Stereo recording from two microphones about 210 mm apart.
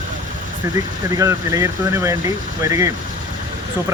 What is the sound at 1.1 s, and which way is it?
Speech, 15° right (ahead or behind).